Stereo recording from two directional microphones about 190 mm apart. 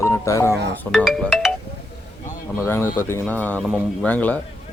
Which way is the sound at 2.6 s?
10° left (ahead or behind).